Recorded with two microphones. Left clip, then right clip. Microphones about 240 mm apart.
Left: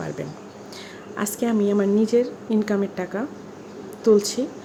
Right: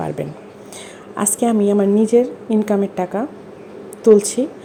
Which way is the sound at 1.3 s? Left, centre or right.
Centre.